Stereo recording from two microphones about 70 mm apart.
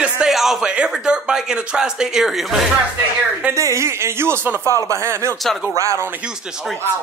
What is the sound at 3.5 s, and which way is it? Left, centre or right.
Speech, right.